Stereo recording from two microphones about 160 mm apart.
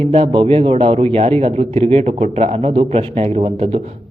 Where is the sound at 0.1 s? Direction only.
35° right (ahead or behind).